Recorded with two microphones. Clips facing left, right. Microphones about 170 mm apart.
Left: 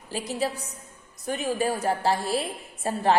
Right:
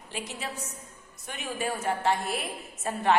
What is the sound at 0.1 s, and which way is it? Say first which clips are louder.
A woman's voice: left 8 dB; 35° left (ahead or behind).